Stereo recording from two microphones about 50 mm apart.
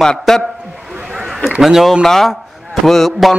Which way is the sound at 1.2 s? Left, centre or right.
Centre.